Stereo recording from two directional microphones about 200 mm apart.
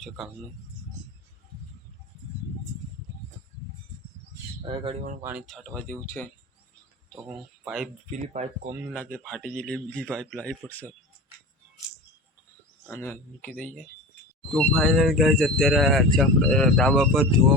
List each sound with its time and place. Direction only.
4.6 s speech: 25° right (ahead or behind)
5.2 s speech: 5° right (ahead or behind)
7.3 s speech: centre (ahead or behind)
8.1 s speech: 35° right (ahead or behind)
9.1 s speech: 5° left (ahead or behind)
12.9 s speech: 10° left (ahead or behind)